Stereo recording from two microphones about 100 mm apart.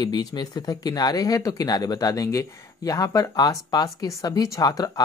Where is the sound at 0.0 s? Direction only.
45° left (ahead or behind).